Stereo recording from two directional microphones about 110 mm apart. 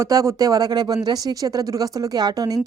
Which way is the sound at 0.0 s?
30° right (ahead or behind).